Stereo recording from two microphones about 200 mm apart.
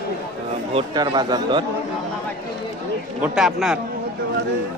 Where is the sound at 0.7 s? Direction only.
20° right (ahead or behind).